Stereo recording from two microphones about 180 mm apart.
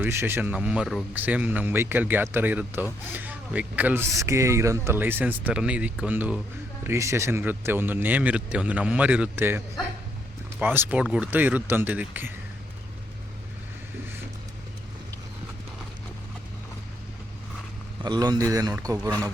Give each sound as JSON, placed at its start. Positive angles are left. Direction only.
{"t": 0.0, "sound": "speech", "side_deg": -10}
{"t": 18.0, "sound": "speech", "side_deg": -25}